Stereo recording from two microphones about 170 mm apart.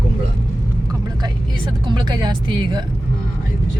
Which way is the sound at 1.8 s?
25° right (ahead or behind).